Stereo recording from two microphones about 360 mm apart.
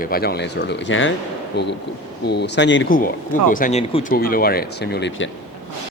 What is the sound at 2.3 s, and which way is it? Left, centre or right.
Speech, left.